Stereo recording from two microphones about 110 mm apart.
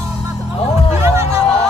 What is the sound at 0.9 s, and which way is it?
Music, 25° right (ahead or behind).